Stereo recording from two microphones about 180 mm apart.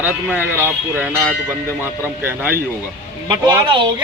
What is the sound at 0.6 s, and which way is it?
Speech, 10° right (ahead or behind).